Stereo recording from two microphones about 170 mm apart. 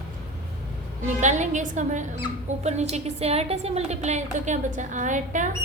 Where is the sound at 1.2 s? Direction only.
45° right (ahead or behind).